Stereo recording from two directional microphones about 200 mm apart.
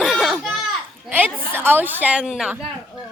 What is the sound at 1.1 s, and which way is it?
A woman's voice, 10° right (ahead or behind).